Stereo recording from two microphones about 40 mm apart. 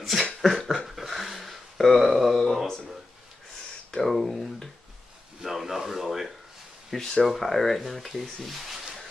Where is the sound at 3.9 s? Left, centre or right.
Centre.